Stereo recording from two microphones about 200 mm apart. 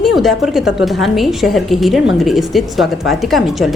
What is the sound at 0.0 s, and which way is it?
A woman's voice, centre (ahead or behind).